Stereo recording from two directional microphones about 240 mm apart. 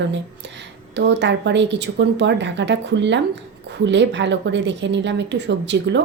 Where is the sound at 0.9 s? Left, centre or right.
Right.